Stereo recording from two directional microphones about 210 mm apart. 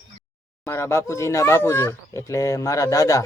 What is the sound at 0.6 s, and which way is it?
Speech, 10° left (ahead or behind).